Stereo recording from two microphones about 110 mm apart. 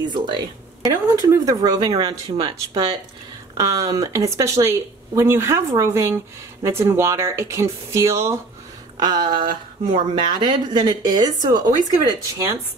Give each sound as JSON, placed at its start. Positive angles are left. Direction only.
{"t": 0.0, "sound": "speech", "side_deg": -45}
{"t": 2.2, "sound": "speech", "side_deg": -50}
{"t": 3.5, "sound": "a woman's voice", "side_deg": -30}
{"t": 9.0, "sound": "speech", "side_deg": -40}